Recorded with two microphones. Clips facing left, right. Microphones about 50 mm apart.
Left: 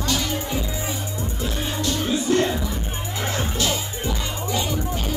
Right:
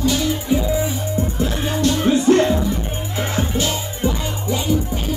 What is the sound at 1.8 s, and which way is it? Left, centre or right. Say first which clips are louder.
Music: right 8 dB; right.